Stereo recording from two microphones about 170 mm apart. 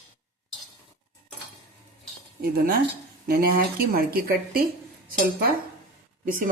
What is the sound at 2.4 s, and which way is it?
Speech, 60° right (ahead or behind).